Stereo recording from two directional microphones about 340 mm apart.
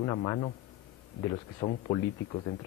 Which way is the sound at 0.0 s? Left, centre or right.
Centre.